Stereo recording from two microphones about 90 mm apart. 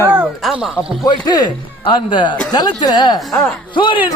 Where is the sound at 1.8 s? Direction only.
65° left (ahead or behind).